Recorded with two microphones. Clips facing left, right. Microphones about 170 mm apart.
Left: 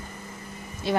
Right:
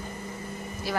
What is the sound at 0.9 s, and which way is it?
Speech, 25° left (ahead or behind).